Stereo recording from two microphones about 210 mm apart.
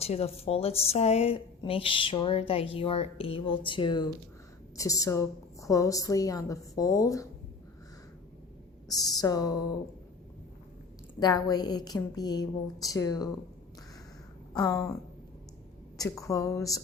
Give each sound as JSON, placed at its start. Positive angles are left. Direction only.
{"t": 0.0, "sound": "a woman's voice", "side_deg": 30}
{"t": 8.9, "sound": "a woman's voice", "side_deg": 15}
{"t": 11.2, "sound": "a woman's voice", "side_deg": 20}
{"t": 14.5, "sound": "a woman's voice", "side_deg": 15}
{"t": 16.0, "sound": "a woman's voice", "side_deg": 15}